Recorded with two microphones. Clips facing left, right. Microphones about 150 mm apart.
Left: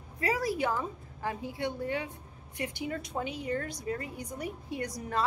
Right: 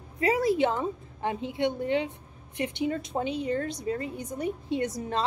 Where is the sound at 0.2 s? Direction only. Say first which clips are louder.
Right 6 dB; 25° right (ahead or behind).